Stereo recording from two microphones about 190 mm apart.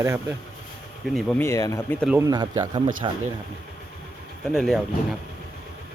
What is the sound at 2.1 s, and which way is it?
Speech, 20° right (ahead or behind).